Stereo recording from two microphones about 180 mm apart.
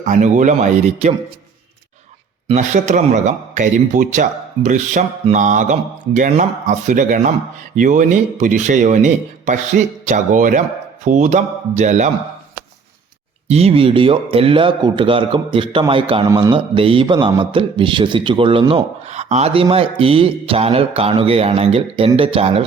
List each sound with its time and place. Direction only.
0.0 s a man's voice: 45° right (ahead or behind)
2.5 s a man's voice: 40° right (ahead or behind)
13.5 s speech: 35° right (ahead or behind)
19.0 s a man's voice: 40° right (ahead or behind)